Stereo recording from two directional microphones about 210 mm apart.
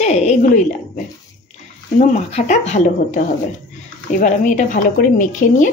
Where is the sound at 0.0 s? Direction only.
35° left (ahead or behind).